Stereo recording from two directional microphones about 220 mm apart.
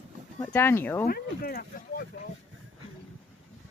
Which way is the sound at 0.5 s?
10° left (ahead or behind).